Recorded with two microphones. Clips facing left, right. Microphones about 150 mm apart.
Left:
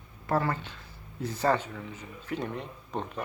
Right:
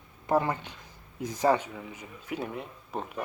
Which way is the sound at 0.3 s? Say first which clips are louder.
Right 2 dB; 15° right (ahead or behind).